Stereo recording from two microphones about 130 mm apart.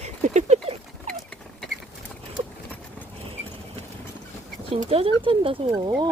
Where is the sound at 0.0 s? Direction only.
60° right (ahead or behind).